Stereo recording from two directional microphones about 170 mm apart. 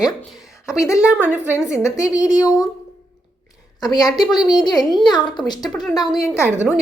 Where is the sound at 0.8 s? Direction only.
20° left (ahead or behind).